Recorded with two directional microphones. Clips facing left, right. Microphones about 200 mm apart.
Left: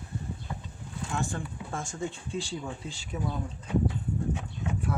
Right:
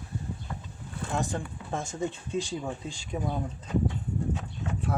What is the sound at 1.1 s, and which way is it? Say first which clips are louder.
Speech: right 2 dB; 20° right (ahead or behind).